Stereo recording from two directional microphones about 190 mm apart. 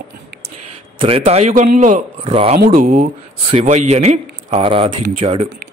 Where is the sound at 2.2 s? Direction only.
30° right (ahead or behind).